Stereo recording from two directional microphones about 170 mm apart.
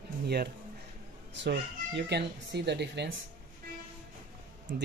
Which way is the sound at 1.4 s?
85° right.